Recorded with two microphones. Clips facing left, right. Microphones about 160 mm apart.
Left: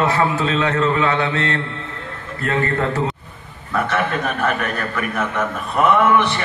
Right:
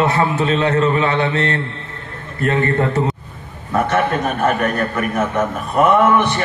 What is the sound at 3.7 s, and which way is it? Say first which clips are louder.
A man's voice: right 4 dB; 40° right (ahead or behind).